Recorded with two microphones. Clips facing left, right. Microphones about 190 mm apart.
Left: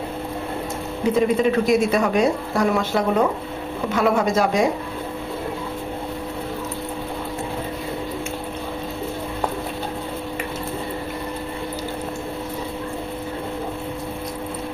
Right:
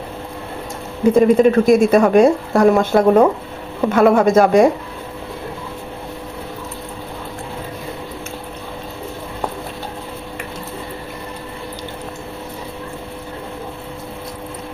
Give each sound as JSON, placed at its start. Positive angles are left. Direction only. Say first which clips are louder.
{"t": 1.1, "sound": "speech", "louder": "right 7 dB", "side_deg": -50}